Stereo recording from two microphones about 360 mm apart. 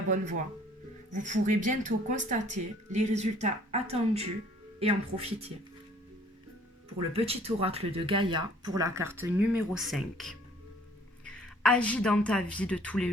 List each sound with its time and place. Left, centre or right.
0.1 s speech: right
7.1 s a woman's voice: centre